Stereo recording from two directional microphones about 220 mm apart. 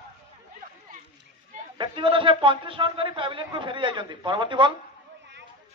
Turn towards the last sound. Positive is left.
turn(degrees=-20)  # may be behind; listen again after turning